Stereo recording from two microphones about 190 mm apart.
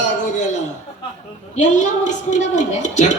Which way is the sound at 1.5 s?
40° left (ahead or behind).